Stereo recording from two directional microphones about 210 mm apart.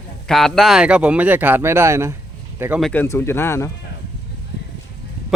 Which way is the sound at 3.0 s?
15° left (ahead or behind).